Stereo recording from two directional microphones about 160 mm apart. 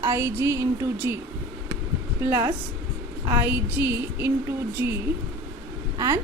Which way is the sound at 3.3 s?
15° right (ahead or behind).